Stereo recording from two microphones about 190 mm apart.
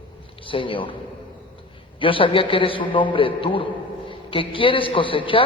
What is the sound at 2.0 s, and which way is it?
A man's voice, 25° left (ahead or behind).